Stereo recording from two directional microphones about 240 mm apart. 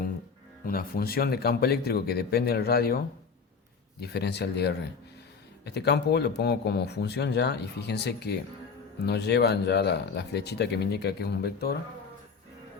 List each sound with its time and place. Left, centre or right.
0.6 s speech: left
4.0 s a man's voice: left